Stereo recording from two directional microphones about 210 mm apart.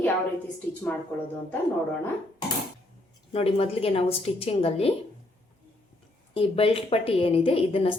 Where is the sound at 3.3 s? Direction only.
25° left (ahead or behind).